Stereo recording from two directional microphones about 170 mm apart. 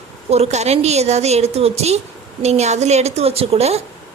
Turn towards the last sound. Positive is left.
turn(degrees=-35)  # may be behind; listen again after turning